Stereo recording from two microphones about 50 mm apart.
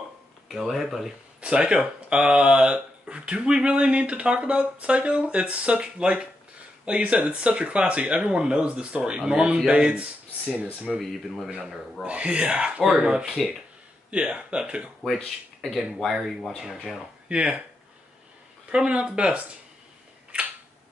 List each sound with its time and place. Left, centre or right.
0.5 s speech: centre
1.4 s speech: right
11.0 s speech: centre
12.1 s speech: right
12.8 s speech: centre
15.0 s speech: centre
16.1 s speech: centre
17.3 s speech: right
18.7 s speech: right